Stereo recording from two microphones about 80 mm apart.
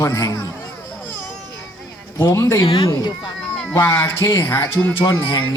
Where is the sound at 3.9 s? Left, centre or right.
Left.